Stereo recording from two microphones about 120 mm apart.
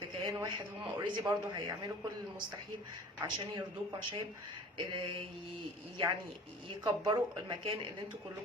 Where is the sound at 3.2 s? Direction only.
35° right (ahead or behind).